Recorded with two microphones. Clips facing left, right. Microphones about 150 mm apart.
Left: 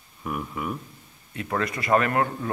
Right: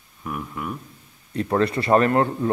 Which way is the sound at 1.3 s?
30° right (ahead or behind).